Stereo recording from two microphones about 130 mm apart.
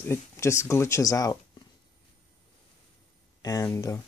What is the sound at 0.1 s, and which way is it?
Speech, 20° left (ahead or behind).